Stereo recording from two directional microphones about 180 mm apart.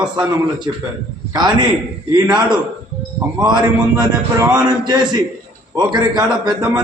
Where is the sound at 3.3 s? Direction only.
20° right (ahead or behind).